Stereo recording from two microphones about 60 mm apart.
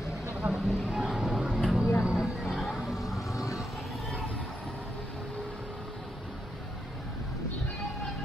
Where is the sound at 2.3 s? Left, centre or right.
Centre.